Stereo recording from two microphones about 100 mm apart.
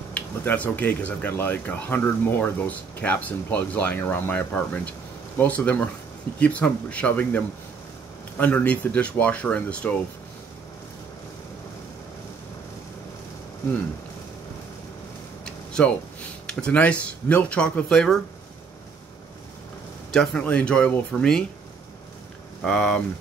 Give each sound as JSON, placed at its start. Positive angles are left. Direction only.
{"t": 0.1, "sound": "speech", "side_deg": 20}
{"t": 15.4, "sound": "speech", "side_deg": 10}
{"t": 20.1, "sound": "a man's voice", "side_deg": 5}
{"t": 22.6, "sound": "speech", "side_deg": 5}